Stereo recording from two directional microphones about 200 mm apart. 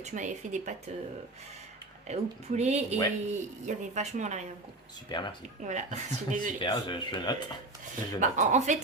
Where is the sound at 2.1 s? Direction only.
35° right (ahead or behind).